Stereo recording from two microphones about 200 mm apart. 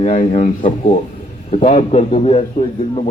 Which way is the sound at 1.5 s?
30° left (ahead or behind).